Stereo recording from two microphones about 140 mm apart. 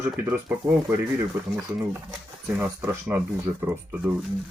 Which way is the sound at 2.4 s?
10° right (ahead or behind).